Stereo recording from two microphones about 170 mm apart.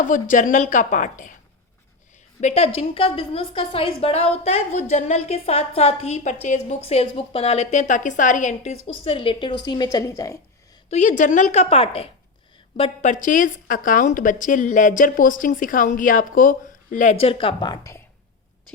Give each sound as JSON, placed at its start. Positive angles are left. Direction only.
{"t": 0.0, "sound": "a woman's voice", "side_deg": 50}
{"t": 2.4, "sound": "a woman's voice", "side_deg": 35}
{"t": 10.8, "sound": "a woman's voice", "side_deg": 40}